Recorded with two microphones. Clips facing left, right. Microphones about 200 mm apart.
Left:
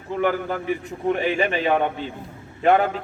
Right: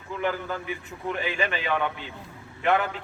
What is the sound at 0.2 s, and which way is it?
A man's voice, 40° left (ahead or behind).